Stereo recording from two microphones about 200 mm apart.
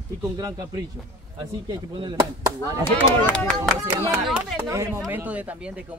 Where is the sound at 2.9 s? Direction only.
10° left (ahead or behind).